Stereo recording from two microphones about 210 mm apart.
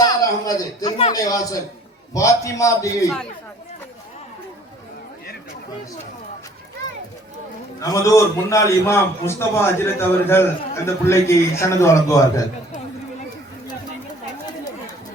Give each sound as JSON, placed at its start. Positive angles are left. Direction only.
{"t": 0.0, "sound": "a sound", "side_deg": 15}
{"t": 0.9, "sound": "speech", "side_deg": 30}
{"t": 1.1, "sound": "a man's voice", "side_deg": 15}
{"t": 7.8, "sound": "a man's voice", "side_deg": 15}